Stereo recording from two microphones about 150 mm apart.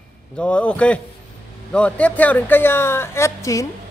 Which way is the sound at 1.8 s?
10° left (ahead or behind).